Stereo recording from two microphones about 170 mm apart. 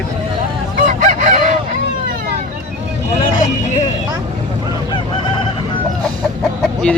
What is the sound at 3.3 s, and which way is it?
Vehicle, 45° left (ahead or behind).